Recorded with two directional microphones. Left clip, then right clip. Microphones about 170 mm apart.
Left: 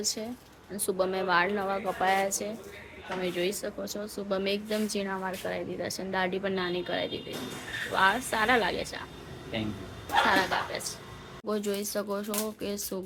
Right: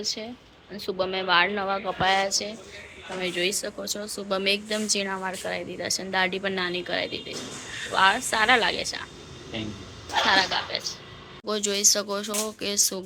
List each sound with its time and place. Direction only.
0.0 s speech: 20° left (ahead or behind)
10.2 s speech: 10° left (ahead or behind)